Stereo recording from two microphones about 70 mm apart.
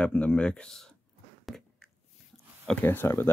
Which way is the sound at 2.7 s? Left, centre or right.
Left.